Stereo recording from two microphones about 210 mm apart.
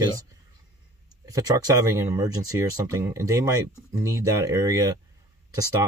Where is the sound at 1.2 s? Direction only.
15° right (ahead or behind).